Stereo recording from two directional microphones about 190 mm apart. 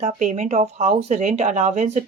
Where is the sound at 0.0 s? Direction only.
40° right (ahead or behind).